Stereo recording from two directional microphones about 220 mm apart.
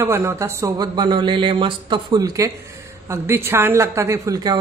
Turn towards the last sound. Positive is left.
turn(degrees=-15)  # may be behind; listen again after turning